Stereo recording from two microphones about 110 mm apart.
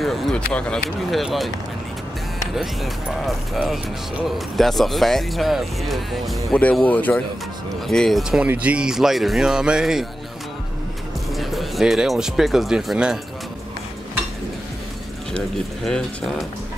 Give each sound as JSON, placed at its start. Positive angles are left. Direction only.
{"t": 0.0, "sound": "speech", "side_deg": 5}
{"t": 1.2, "sound": "speech", "side_deg": 0}
{"t": 2.5, "sound": "speech", "side_deg": 0}
{"t": 7.8, "sound": "speech", "side_deg": 5}
{"t": 11.3, "sound": "speech", "side_deg": 0}
{"t": 15.3, "sound": "speech", "side_deg": 5}